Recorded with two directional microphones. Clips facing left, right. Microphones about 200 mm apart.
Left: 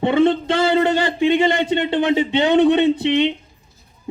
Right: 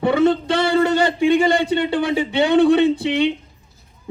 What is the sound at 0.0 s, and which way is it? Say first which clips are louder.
Speech: even; 25° left (ahead or behind).